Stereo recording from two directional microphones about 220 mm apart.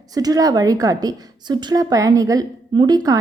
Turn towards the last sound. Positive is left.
turn(degrees=-15)  # may be behind; listen again after turning